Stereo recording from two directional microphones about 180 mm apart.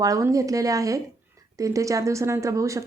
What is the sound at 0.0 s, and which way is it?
Speech, 20° right (ahead or behind).